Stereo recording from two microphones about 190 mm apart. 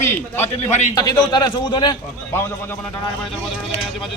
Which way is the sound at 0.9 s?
20° left (ahead or behind).